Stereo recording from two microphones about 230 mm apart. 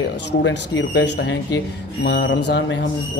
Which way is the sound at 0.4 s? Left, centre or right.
Left.